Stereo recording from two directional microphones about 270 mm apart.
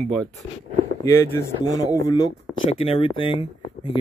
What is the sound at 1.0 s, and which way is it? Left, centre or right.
Speech, centre.